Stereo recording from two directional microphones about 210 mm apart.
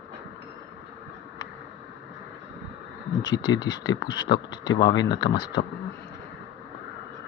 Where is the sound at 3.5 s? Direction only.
20° left (ahead or behind).